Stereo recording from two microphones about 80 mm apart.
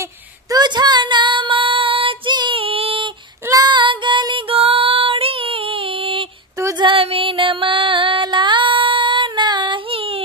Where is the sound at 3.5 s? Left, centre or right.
Right.